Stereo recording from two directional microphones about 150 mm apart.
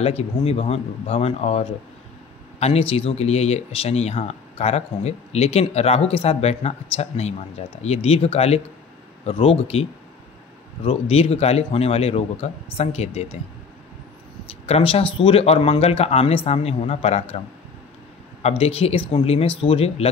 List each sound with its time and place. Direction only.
0.0 s speech: 40° left (ahead or behind)
10.9 s speech: 40° left (ahead or behind)
14.7 s speech: 40° left (ahead or behind)
18.4 s speech: 40° left (ahead or behind)